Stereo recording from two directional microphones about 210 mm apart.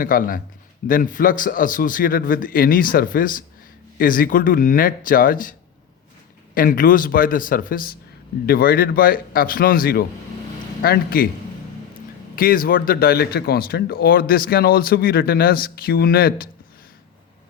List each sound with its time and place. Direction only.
0.0 s a man's voice: 40° left (ahead or behind)
12.4 s speech: 45° left (ahead or behind)